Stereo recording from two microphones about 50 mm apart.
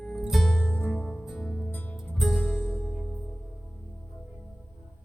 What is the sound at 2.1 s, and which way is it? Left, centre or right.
Music, centre.